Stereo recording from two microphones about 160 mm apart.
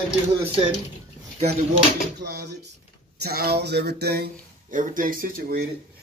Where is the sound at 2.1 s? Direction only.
85° right.